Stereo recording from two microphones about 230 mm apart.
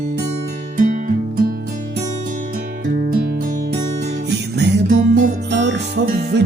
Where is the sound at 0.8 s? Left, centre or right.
Right.